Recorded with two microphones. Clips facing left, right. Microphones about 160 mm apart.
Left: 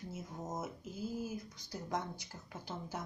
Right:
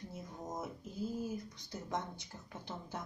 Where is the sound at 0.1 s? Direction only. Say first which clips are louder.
Left 2 dB; 5° left (ahead or behind).